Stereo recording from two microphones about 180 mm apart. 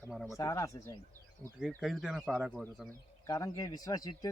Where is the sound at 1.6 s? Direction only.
Centre (ahead or behind).